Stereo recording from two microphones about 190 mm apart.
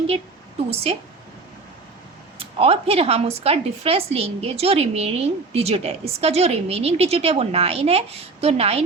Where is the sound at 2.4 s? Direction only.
30° right (ahead or behind).